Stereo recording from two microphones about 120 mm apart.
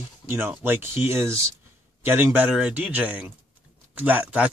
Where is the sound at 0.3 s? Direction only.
20° right (ahead or behind).